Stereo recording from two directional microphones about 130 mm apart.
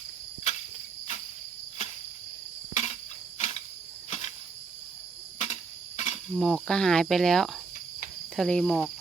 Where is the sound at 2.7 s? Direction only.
60° left (ahead or behind).